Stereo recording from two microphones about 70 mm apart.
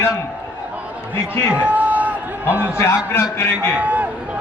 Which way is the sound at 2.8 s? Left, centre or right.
Left.